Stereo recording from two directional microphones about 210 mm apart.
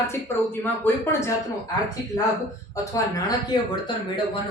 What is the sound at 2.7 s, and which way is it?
Speech, 15° left (ahead or behind).